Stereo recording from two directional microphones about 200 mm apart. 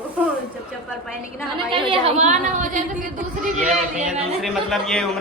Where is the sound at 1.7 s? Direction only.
30° right (ahead or behind).